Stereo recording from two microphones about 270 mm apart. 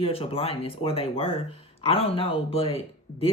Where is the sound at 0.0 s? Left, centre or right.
Left.